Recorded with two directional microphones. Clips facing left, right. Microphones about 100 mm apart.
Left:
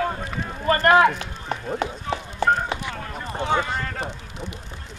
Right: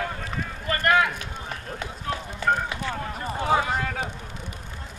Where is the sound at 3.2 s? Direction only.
5° right (ahead or behind).